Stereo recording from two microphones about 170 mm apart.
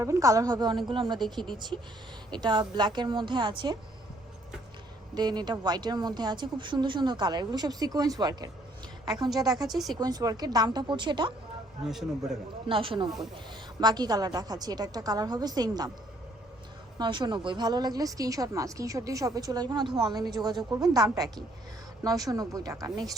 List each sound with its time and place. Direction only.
0.0 s speech: 20° right (ahead or behind)
2.4 s speech: 25° right (ahead or behind)
5.1 s speech: 25° right (ahead or behind)
9.6 s a man's voice: centre (ahead or behind)
10.0 s speech: 20° right (ahead or behind)
11.9 s a man's voice: centre (ahead or behind)
12.6 s speech: 30° right (ahead or behind)
17.0 s speech: 25° right (ahead or behind)